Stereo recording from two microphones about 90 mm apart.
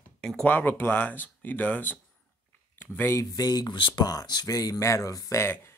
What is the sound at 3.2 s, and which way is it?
Speech, 45° left (ahead or behind).